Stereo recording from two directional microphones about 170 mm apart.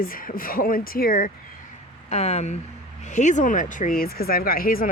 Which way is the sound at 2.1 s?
40° left (ahead or behind).